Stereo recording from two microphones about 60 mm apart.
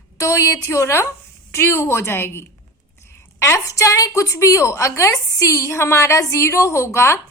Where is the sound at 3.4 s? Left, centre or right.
Left.